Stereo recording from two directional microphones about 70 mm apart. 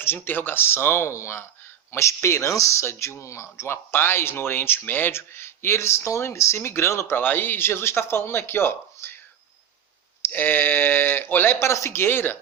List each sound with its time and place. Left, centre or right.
0.0 s speech: left
10.2 s speech: left